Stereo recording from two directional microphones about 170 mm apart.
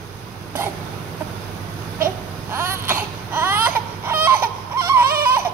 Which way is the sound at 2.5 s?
15° right (ahead or behind).